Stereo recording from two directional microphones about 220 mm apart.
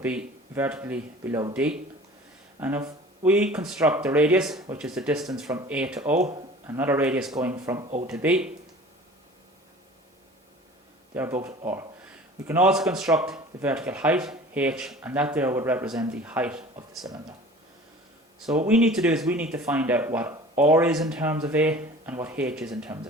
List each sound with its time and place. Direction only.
0.0 s a man's voice: 5° right (ahead or behind)
7.5 s a man's voice: 15° right (ahead or behind)
11.1 s a man's voice: 10° right (ahead or behind)
18.3 s a man's voice: 5° right (ahead or behind)